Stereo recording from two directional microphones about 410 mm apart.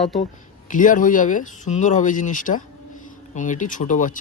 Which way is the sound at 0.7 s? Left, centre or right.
Centre.